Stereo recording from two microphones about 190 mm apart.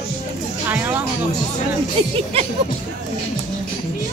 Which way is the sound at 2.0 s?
25° right (ahead or behind).